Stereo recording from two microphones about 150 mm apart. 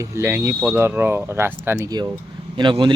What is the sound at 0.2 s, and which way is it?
Speech, 15° right (ahead or behind).